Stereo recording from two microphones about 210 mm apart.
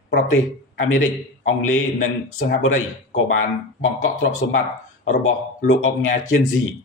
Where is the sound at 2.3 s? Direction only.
35° left (ahead or behind).